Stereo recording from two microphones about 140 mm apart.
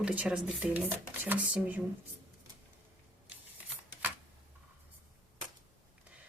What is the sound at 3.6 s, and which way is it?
Shuffling cards, 10° right (ahead or behind).